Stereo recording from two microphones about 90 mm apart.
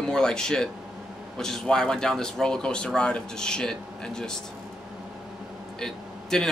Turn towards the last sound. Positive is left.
turn(degrees=5)  # may be behind; listen again after turning